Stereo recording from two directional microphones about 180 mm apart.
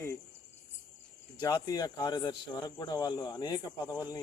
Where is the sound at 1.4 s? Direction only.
20° left (ahead or behind).